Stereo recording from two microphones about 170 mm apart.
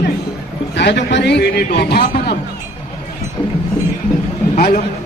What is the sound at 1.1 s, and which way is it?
Speech, 80° left.